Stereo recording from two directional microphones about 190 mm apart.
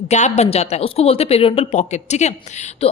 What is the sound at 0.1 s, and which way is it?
A woman's voice, 35° left (ahead or behind).